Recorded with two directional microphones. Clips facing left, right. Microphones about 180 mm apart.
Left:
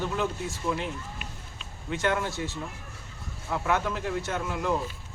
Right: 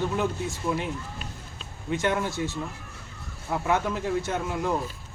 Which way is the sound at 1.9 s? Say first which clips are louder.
Right 2 dB; 15° right (ahead or behind).